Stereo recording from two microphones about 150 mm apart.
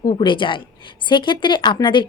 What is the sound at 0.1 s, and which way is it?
Speech, 35° left (ahead or behind).